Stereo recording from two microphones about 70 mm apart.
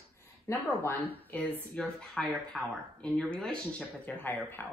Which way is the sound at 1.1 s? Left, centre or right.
Left.